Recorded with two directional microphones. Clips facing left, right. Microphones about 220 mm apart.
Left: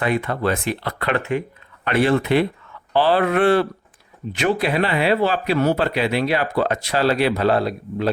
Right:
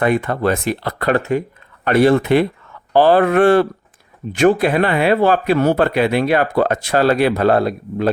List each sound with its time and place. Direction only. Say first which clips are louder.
0.0 s speech: right 4 dB; 50° right (ahead or behind)